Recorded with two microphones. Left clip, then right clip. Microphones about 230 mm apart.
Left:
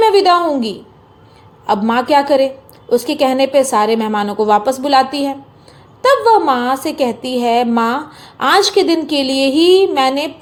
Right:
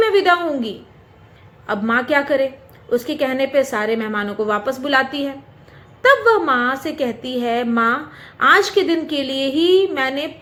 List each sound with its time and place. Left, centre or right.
0.0 s a woman's voice: centre